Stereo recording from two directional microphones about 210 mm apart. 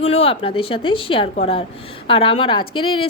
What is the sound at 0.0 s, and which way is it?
A woman's voice, 30° left (ahead or behind).